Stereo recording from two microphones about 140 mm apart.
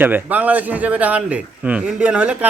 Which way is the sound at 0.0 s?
10° right (ahead or behind).